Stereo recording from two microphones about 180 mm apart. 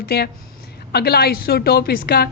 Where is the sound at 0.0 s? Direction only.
65° left (ahead or behind).